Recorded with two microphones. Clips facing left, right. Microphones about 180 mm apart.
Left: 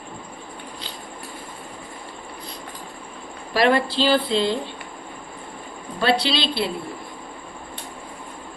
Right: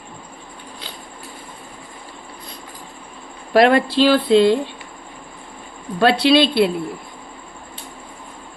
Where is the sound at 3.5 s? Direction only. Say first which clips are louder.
Right 5 dB; 55° right (ahead or behind).